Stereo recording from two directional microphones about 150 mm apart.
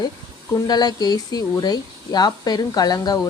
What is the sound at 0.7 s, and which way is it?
Speech, 25° left (ahead or behind).